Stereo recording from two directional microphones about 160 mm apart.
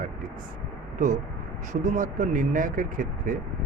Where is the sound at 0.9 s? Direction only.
50° right (ahead or behind).